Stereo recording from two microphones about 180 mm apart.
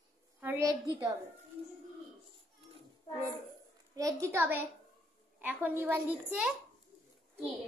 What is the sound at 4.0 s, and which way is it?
A woman's voice, 20° right (ahead or behind).